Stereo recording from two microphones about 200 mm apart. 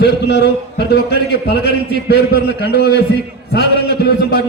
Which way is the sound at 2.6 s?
55° left (ahead or behind).